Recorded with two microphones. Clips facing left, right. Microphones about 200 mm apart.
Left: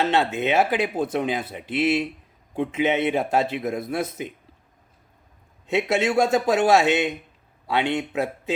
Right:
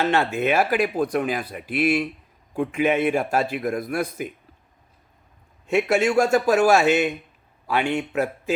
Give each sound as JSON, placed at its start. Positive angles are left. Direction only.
{"t": 0.0, "sound": "a man's voice", "side_deg": 20}
{"t": 5.6, "sound": "a man's voice", "side_deg": 20}